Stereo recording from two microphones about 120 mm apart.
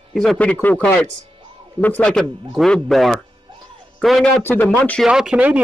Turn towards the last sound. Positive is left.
turn(degrees=-10)  # may be behind; listen again after turning